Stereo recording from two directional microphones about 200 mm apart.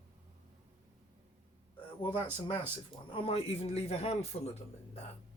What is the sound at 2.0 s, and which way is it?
A man's voice, 25° left (ahead or behind).